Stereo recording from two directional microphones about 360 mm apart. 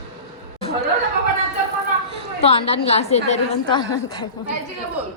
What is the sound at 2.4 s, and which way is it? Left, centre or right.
A woman's voice, centre.